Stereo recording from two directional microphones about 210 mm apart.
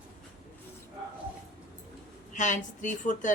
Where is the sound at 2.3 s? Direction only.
35° left (ahead or behind).